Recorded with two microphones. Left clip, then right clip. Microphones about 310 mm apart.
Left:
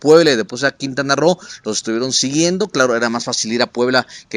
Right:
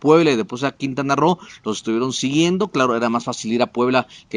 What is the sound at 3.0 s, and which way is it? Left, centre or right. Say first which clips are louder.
Speech: left 3 dB; right.